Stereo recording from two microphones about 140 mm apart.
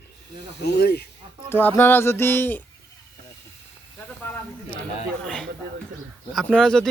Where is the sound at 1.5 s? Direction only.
15° left (ahead or behind).